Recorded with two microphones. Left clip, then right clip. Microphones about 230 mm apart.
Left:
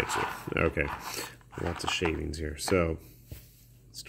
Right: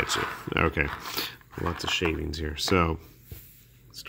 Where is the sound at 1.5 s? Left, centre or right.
Centre.